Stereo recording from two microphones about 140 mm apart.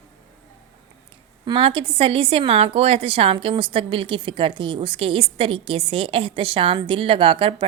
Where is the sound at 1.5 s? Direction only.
40° right (ahead or behind).